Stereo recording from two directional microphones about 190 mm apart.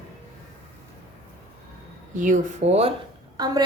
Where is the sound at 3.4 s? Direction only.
20° right (ahead or behind).